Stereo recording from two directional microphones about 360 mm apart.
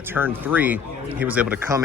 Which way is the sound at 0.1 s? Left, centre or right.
Centre.